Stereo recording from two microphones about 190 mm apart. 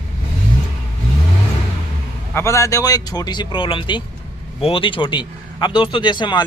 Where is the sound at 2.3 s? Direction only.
15° left (ahead or behind).